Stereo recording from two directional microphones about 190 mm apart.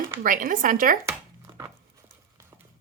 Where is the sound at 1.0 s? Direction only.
15° right (ahead or behind).